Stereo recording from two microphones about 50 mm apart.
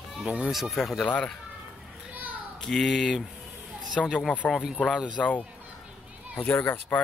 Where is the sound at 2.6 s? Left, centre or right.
Centre.